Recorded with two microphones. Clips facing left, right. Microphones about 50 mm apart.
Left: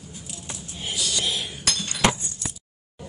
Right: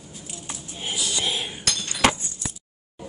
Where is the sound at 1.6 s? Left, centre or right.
Centre.